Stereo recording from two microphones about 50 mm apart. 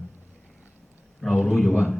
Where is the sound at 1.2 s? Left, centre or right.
Centre.